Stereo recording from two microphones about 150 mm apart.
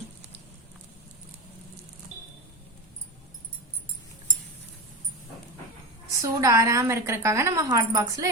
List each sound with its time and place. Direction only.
6.1 s a woman's voice: 20° right (ahead or behind)